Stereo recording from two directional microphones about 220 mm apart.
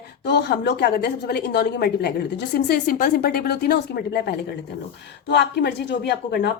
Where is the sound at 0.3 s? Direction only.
50° left (ahead or behind).